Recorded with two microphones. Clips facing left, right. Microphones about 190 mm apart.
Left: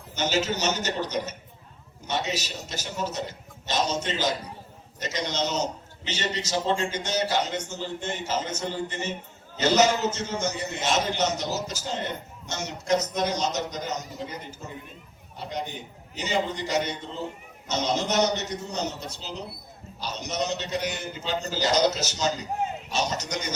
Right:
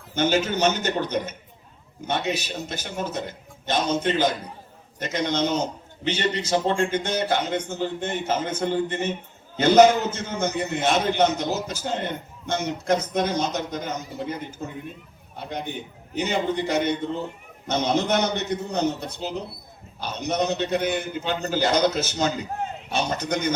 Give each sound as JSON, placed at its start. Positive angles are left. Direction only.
{"t": 0.1, "sound": "a man's voice", "side_deg": -55}